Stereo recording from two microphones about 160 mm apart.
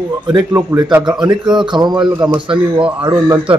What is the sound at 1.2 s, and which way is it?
A man's voice, 25° right (ahead or behind).